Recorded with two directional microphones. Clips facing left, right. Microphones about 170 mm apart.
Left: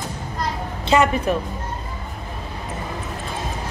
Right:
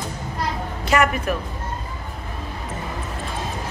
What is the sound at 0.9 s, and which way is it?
Speech, 25° left (ahead or behind).